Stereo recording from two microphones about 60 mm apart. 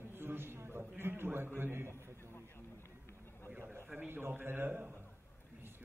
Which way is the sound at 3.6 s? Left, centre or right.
Right.